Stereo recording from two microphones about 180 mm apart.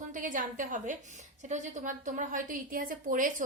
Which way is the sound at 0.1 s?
45° right (ahead or behind).